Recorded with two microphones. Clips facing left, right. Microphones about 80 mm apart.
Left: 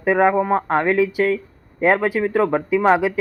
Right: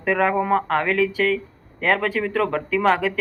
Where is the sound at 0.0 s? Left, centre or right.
Centre.